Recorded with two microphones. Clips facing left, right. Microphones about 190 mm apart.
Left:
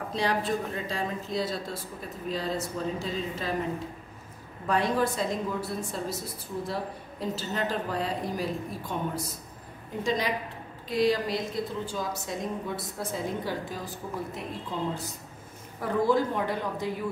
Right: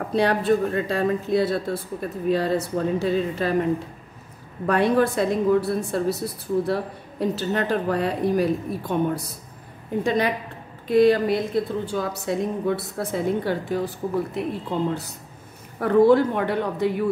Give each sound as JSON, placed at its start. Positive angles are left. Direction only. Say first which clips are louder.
{"t": 0.1, "sound": "a woman's voice", "louder": "right 8 dB", "side_deg": -60}
{"t": 4.6, "sound": "a woman's voice", "louder": "right 7 dB", "side_deg": -65}
{"t": 15.8, "sound": "a woman's voice", "louder": "right 9 dB", "side_deg": -65}